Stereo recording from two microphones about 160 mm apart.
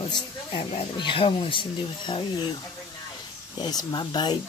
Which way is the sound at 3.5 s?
25° left (ahead or behind).